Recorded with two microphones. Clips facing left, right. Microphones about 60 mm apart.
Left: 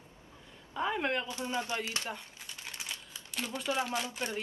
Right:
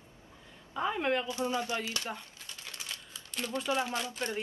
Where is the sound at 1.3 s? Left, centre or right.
Left.